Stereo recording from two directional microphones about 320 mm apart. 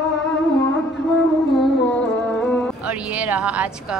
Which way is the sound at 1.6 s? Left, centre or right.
Centre.